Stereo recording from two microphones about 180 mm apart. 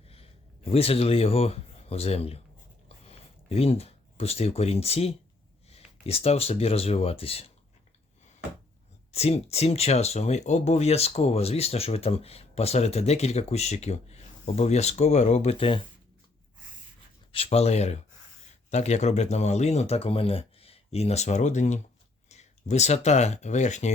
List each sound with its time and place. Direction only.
0.1 s speech: 30° left (ahead or behind)
9.1 s speech: 35° left (ahead or behind)
17.3 s speech: 35° left (ahead or behind)